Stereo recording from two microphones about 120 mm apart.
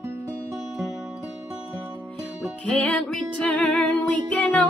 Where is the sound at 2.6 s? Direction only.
10° left (ahead or behind).